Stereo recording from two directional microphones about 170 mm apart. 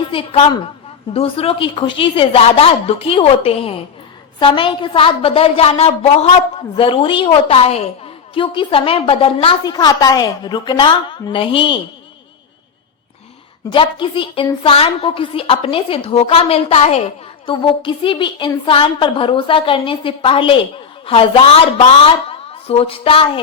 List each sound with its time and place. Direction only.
0.1 s a woman's voice: 30° left (ahead or behind)
13.7 s a woman's voice: 30° left (ahead or behind)